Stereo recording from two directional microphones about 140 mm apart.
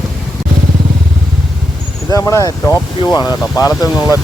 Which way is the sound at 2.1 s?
25° left (ahead or behind).